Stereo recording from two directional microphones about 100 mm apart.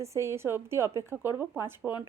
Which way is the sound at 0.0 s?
30° right (ahead or behind).